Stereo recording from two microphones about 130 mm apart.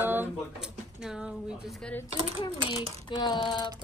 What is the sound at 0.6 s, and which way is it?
Speech, 5° right (ahead or behind).